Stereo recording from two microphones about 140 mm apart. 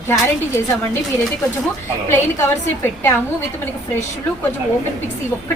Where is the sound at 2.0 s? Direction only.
20° left (ahead or behind).